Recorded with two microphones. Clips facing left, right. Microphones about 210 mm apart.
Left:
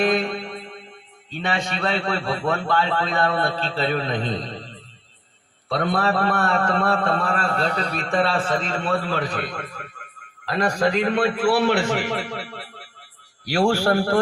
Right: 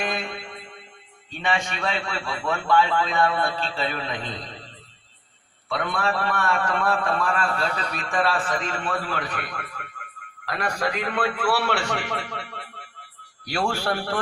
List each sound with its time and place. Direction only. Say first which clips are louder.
0.2 s mantra: left 7 dB; 35° left (ahead or behind)
1.3 s a man's voice: left 1 dB; 35° left (ahead or behind)
5.6 s a man's voice: left 4 dB; 35° left (ahead or behind); by 11.9 s 20° left (ahead or behind)
11.9 s a man's voice: left 5 dB; 30° left (ahead or behind)